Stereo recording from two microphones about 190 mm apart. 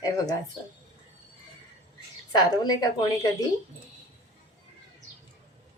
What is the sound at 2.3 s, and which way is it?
A woman's voice, 20° left (ahead or behind).